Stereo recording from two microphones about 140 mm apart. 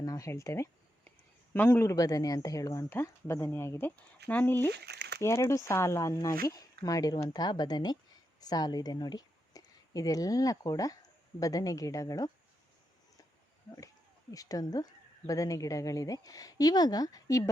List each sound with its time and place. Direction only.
0.0 s speech: 25° left (ahead or behind)
13.7 s speech: 25° left (ahead or behind)